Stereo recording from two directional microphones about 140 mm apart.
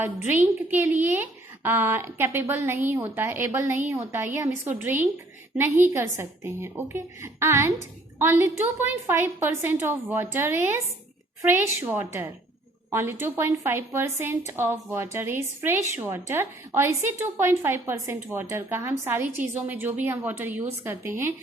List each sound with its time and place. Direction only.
0.7 s speech: 15° right (ahead or behind)